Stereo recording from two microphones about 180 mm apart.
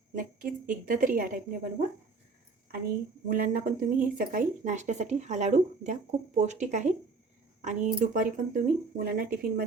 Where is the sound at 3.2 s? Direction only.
50° right (ahead or behind).